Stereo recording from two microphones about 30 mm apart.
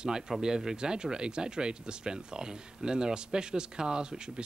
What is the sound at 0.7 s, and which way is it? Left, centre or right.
Speech, right.